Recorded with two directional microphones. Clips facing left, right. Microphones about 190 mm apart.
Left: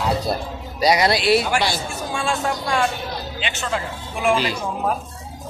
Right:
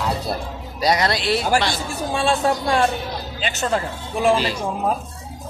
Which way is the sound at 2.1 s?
30° right (ahead or behind).